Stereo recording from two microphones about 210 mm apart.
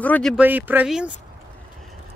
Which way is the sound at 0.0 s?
5° left (ahead or behind).